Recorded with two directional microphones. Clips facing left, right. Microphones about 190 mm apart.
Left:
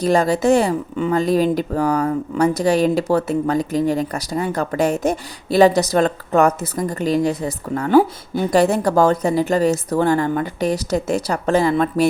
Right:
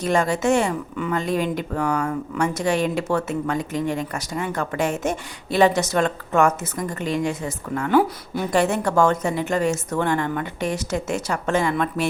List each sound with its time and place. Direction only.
0.0 s speech: 35° left (ahead or behind)